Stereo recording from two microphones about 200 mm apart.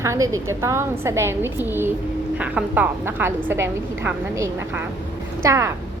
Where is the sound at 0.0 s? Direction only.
15° right (ahead or behind).